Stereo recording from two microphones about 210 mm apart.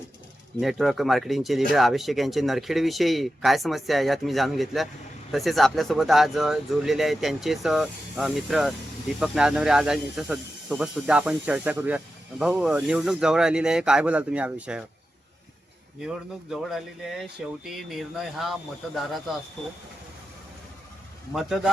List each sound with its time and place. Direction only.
0.6 s speech: centre (ahead or behind)
16.0 s speech: 5° right (ahead or behind)
21.3 s speech: centre (ahead or behind)